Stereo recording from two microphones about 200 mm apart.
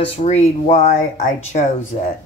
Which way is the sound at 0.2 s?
35° left (ahead or behind).